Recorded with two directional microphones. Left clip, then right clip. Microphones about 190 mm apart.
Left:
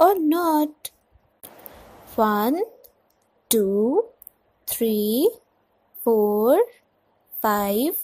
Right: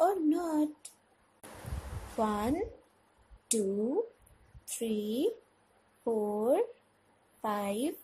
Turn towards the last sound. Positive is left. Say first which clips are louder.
# left 12 dB
turn(degrees=40)  # may be behind; listen again after turning